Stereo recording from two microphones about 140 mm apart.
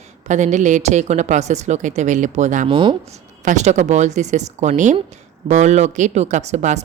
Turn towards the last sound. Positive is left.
turn(degrees=-55)  # may be behind; listen again after turning